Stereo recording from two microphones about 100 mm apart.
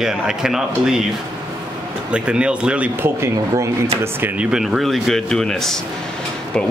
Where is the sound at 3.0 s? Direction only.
30° right (ahead or behind).